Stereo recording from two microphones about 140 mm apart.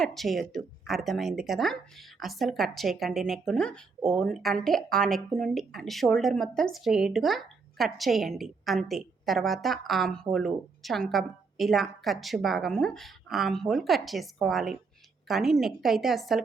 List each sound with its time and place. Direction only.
0.0 s speech: centre (ahead or behind)